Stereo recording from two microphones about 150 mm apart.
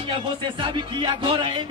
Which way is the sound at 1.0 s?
30° right (ahead or behind).